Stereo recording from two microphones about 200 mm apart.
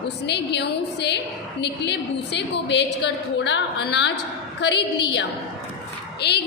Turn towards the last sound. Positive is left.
turn(degrees=55)  # may be behind; listen again after turning